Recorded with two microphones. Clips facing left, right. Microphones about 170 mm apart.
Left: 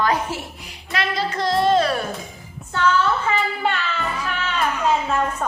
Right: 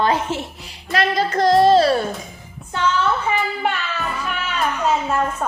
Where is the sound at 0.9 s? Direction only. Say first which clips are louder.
Right 5 dB; 45° right (ahead or behind).